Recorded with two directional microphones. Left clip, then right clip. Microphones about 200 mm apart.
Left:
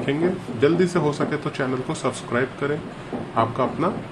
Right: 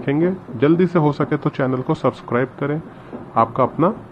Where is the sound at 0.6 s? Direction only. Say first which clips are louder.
Right 3 dB; 25° right (ahead or behind).